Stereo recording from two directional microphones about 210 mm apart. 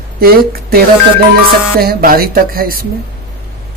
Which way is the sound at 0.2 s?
45° right (ahead or behind).